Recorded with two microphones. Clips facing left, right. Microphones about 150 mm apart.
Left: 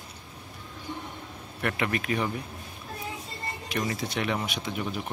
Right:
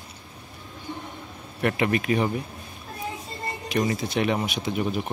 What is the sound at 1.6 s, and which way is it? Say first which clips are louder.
Speech: right 5 dB; 25° right (ahead or behind).